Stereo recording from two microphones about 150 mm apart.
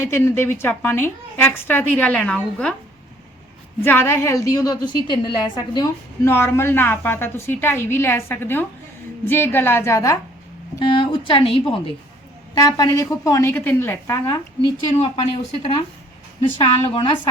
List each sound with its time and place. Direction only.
0.0 s a woman's voice: 15° left (ahead or behind)
3.8 s a woman's voice: 15° left (ahead or behind)
10.8 s a woman's voice: 30° left (ahead or behind)
12.6 s a woman's voice: 25° left (ahead or behind)
14.9 s a woman's voice: 45° left (ahead or behind)